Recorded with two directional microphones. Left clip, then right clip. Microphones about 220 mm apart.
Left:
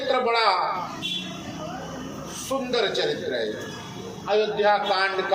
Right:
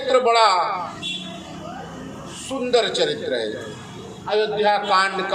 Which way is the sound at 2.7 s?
50° right (ahead or behind).